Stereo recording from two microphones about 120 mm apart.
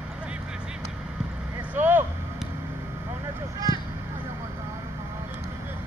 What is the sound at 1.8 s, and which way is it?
Vehicle, 15° right (ahead or behind).